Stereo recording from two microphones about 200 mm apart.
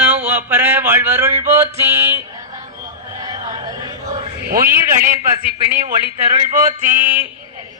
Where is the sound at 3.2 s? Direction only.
20° right (ahead or behind).